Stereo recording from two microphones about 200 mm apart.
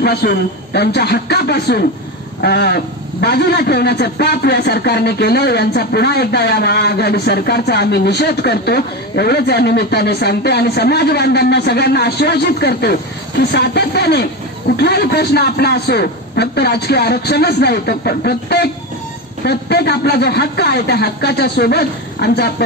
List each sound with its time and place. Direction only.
0.0 s a man's voice: 50° left (ahead or behind)